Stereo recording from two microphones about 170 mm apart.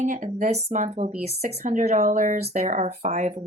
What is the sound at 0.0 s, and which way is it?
Speech, 45° right (ahead or behind).